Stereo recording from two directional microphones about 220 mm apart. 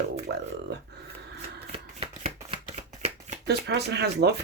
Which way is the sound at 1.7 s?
25° right (ahead or behind).